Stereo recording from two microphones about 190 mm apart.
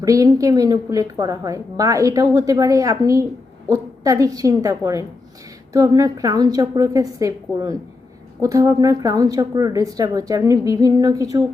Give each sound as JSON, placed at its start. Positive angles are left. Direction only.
{"t": 0.0, "sound": "a woman's voice", "side_deg": -15}